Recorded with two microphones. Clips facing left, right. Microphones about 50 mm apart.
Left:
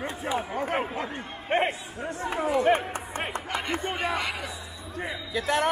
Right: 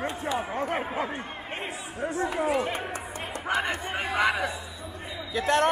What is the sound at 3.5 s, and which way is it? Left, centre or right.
A man's voice, centre.